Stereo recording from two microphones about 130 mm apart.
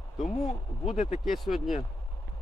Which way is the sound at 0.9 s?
70° left (ahead or behind).